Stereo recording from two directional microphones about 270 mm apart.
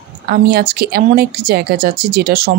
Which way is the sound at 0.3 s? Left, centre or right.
Right.